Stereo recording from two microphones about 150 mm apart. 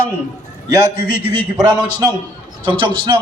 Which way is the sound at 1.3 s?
30° right (ahead or behind).